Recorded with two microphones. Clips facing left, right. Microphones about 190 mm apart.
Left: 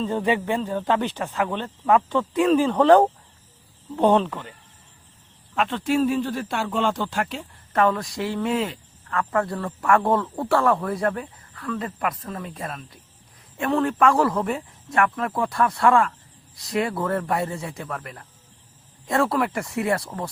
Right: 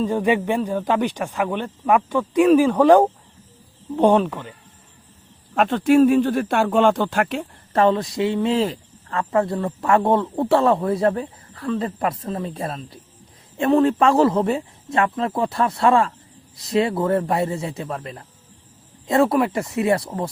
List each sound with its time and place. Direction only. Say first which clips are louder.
0.0 s speech: right 3 dB; 15° right (ahead or behind)
5.5 s speech: right 7 dB; 45° right (ahead or behind)
7.7 s speech: right 4 dB; 30° right (ahead or behind)